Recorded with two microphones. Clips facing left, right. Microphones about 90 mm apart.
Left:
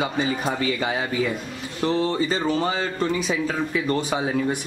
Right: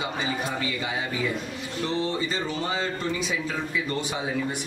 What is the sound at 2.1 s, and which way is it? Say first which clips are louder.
Speech: left 5 dB; 45° left (ahead or behind).